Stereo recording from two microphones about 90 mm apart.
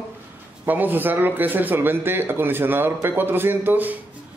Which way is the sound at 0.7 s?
20° right (ahead or behind).